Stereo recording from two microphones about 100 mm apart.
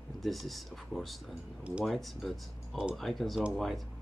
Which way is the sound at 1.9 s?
Centre (ahead or behind).